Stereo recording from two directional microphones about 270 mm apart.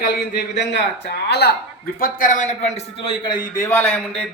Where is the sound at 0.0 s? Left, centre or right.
Left.